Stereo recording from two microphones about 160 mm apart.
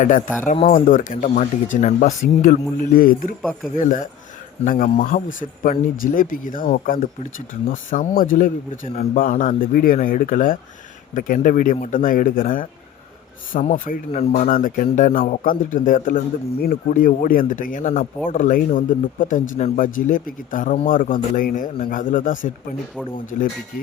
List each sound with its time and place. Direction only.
0.7 s speech: 55° left (ahead or behind)